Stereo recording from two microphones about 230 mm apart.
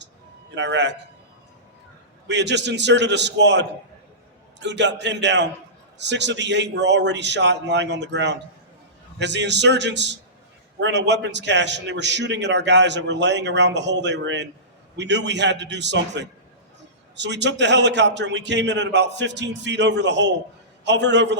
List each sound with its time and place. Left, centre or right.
0.5 s a man's voice: right
2.2 s a man's voice: right